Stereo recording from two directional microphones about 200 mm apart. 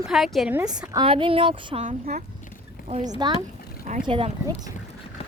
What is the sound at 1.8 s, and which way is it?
Speech, 40° right (ahead or behind).